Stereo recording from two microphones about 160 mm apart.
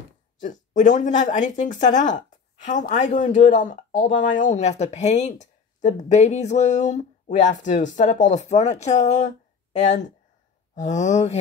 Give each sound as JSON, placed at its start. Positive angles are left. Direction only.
{"t": 0.4, "sound": "speech", "side_deg": 50}